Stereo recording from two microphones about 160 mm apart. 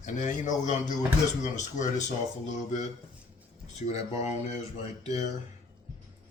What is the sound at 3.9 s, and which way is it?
Speech, 45° left (ahead or behind).